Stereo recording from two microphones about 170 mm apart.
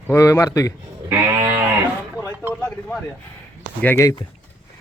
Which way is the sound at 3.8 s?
15° left (ahead or behind).